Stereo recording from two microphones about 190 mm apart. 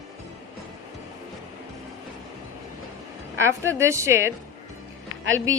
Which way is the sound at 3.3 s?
15° right (ahead or behind).